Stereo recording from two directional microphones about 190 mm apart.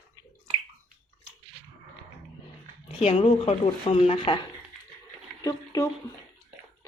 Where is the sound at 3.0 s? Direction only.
35° left (ahead or behind).